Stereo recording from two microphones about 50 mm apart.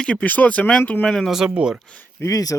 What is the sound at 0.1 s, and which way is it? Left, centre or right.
Speech, left.